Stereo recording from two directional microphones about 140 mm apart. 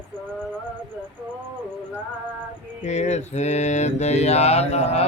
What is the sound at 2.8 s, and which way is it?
Mantra, 55° left (ahead or behind).